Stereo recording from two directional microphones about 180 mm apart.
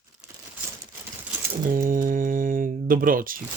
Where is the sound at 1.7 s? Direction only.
50° right (ahead or behind).